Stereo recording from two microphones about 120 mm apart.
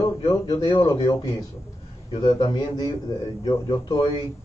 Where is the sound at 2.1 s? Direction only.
35° left (ahead or behind).